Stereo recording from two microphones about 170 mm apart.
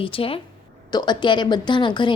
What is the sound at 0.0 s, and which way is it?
Speech, 30° left (ahead or behind).